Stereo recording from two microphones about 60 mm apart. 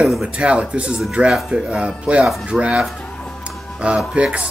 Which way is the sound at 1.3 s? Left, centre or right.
Centre.